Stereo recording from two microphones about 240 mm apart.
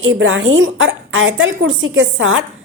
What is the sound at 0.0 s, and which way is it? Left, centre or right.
A woman's voice, right.